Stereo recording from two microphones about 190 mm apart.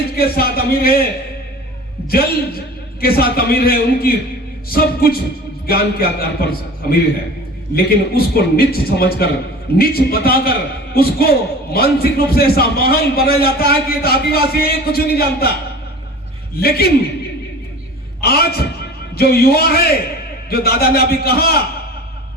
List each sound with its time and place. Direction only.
0.2 s a man's voice: 55° left (ahead or behind)
3.0 s a man's voice: 55° left (ahead or behind)
16.6 s a man's voice: 55° left (ahead or behind)
18.2 s a man's voice: 55° left (ahead or behind)